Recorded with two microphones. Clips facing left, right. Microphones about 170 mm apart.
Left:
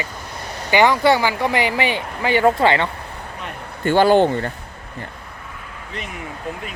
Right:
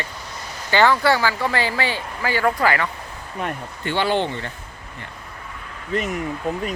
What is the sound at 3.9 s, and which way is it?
Speech, 45° left (ahead or behind).